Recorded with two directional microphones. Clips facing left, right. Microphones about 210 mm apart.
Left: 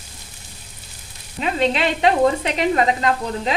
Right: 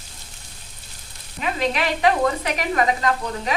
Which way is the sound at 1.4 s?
30° left (ahead or behind).